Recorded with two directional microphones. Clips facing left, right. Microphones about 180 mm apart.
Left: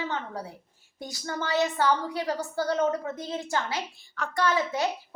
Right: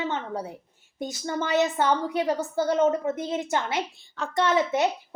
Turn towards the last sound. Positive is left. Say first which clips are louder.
# right 4 dB
turn(degrees=-20)  # may be behind; listen again after turning